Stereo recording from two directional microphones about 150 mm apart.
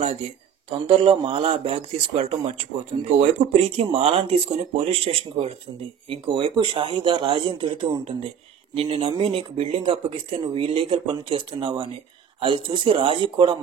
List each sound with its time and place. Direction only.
0.7 s speech: 40° right (ahead or behind)